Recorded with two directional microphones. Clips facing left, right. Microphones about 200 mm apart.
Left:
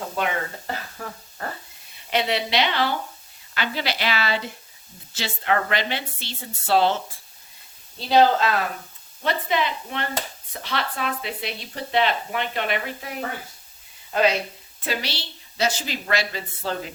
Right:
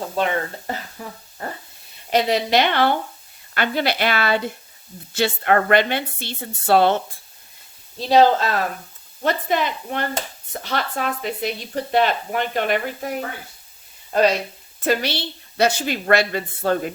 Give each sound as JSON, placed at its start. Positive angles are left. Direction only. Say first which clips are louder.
{"t": 1.0, "sound": "speech", "louder": "even", "side_deg": -10}
{"t": 2.0, "sound": "a woman's voice", "louder": "right 5 dB", "side_deg": -40}
{"t": 8.1, "sound": "speech", "louder": "right 2 dB", "side_deg": -40}
{"t": 14.8, "sound": "a woman's voice", "louder": "right 8 dB", "side_deg": -50}